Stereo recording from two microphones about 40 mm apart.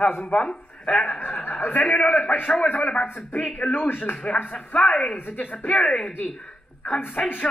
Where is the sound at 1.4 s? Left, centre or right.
Left.